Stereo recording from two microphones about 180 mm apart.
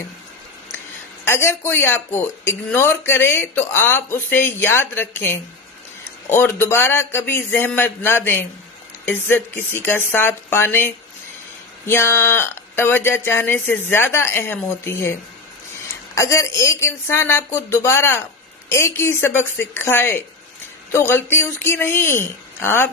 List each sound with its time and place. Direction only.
1.2 s speech: 15° left (ahead or behind)
16.2 s speech: 15° left (ahead or behind)